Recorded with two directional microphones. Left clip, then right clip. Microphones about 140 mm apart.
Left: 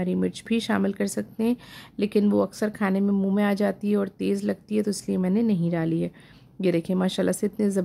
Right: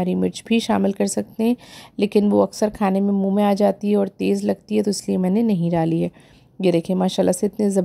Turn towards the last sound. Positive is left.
turn(degrees=-30)  # may be behind; listen again after turning